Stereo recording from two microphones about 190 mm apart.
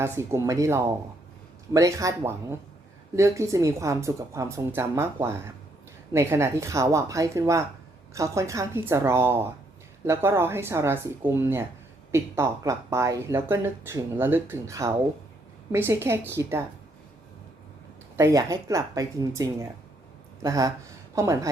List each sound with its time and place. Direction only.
0.0 s speech: 15° right (ahead or behind)
18.2 s speech: 15° right (ahead or behind)